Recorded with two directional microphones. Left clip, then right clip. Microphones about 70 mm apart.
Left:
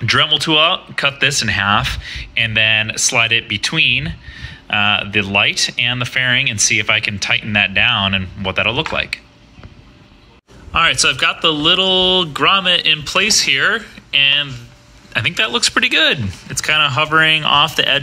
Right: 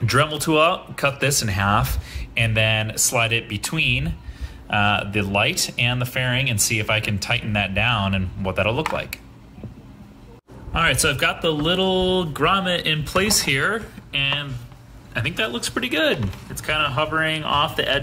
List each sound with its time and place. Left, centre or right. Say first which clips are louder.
0.2 s speech: left 4 dB; right
10.7 s speech: left 6 dB; centre; by 13.8 s right
14.1 s speech: left 10 dB; centre
15.1 s speech: left 8 dB; centre
16.6 s speech: left 7 dB; left